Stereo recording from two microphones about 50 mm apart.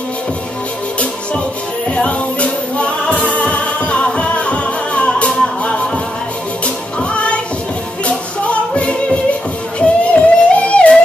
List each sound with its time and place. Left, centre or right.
1.9 s music: left